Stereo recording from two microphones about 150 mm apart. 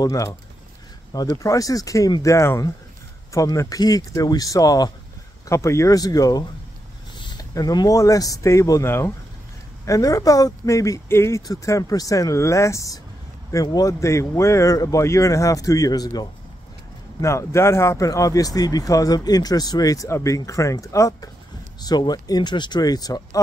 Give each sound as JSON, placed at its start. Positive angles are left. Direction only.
{"t": 0.0, "sound": "speech", "side_deg": 20}